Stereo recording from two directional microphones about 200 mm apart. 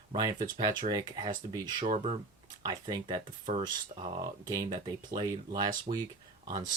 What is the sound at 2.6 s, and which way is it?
Speech, 20° right (ahead or behind).